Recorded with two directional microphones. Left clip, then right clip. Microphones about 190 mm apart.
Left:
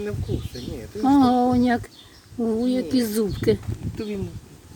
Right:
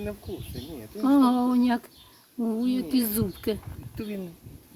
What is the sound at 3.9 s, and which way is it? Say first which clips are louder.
Speech: left 5 dB; 20° right (ahead or behind).